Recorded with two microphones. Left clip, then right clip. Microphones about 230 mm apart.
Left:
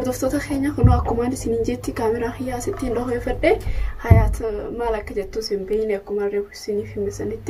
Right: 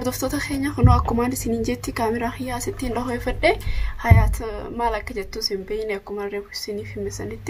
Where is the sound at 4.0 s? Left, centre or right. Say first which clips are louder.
Left 1 dB; right.